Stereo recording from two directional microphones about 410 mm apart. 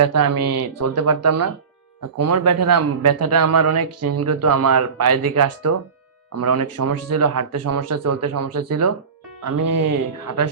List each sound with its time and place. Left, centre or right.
0.0 s a man's voice: right